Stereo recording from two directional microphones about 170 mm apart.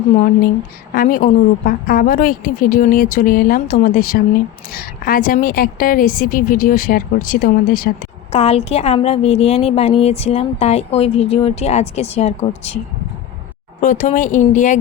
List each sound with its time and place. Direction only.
0.9 s a woman's voice: 55° left (ahead or behind)
8.3 s a woman's voice: 40° left (ahead or behind)
13.8 s speech: 45° left (ahead or behind)